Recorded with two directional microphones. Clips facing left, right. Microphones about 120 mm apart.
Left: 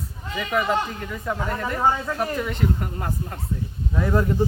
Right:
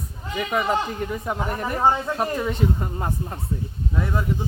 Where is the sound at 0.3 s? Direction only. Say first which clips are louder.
Even; 15° right (ahead or behind).